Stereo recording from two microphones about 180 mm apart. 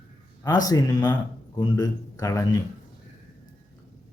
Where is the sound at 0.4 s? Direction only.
20° left (ahead or behind).